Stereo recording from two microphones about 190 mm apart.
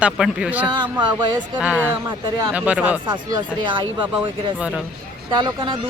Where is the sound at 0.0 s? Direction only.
5° right (ahead or behind).